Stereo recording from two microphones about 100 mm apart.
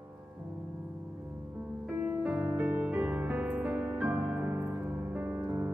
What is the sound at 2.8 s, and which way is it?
Music, 15° right (ahead or behind).